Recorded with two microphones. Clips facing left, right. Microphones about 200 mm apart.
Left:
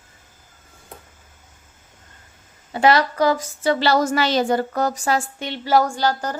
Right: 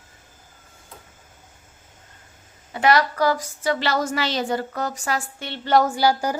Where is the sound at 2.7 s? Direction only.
30° left (ahead or behind).